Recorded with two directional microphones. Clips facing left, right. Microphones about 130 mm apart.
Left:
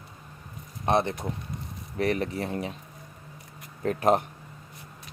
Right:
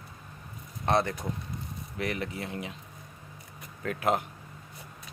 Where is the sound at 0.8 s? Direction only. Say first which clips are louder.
Left 2 dB; 20° left (ahead or behind).